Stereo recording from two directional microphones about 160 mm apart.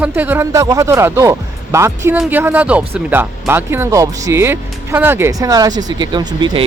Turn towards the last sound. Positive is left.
turn(degrees=-30)  # may be behind; listen again after turning